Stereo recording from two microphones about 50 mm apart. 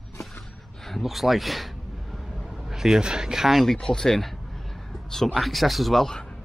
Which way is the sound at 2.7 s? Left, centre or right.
Centre.